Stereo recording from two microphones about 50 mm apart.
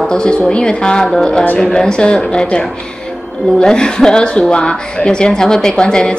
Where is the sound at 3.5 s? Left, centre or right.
Centre.